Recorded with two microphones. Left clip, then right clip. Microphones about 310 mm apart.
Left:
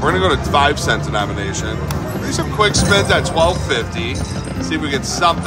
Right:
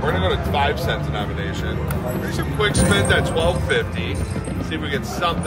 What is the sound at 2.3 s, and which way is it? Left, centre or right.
Speech, centre.